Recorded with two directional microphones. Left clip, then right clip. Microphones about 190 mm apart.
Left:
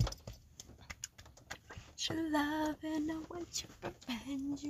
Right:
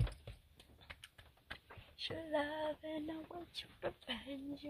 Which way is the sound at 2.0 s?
Centre (ahead or behind).